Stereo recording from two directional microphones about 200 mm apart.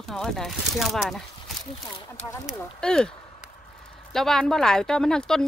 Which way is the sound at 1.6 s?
20° left (ahead or behind).